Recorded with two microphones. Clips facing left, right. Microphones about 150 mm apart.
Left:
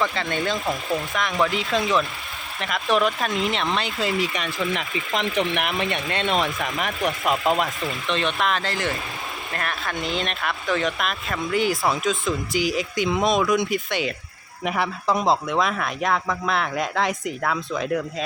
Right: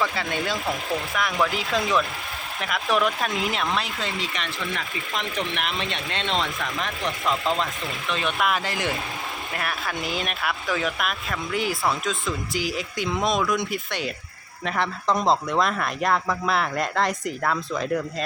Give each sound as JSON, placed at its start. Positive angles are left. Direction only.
{"t": 0.0, "sound": "speech", "side_deg": -5}
{"t": 4.7, "sound": "speech", "side_deg": 20}
{"t": 5.9, "sound": "speech", "side_deg": 55}
{"t": 6.3, "sound": "speech", "side_deg": 20}
{"t": 8.0, "sound": "speech", "side_deg": -5}
{"t": 9.6, "sound": "speech", "side_deg": -5}